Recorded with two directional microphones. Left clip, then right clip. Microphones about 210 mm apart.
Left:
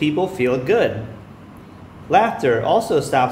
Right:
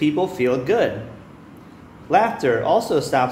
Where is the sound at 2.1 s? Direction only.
5° right (ahead or behind).